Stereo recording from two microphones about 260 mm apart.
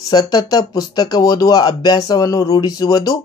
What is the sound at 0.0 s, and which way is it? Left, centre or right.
Speech, centre.